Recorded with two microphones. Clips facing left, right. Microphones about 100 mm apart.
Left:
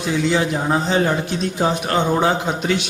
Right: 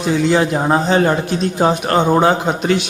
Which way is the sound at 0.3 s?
50° right (ahead or behind).